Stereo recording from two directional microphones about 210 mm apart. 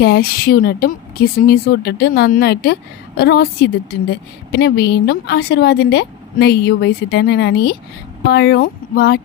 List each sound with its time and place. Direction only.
0.0 s a woman's voice: 45° left (ahead or behind)